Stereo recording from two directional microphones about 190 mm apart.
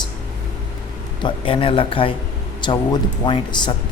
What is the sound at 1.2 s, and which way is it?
Speech, 25° left (ahead or behind).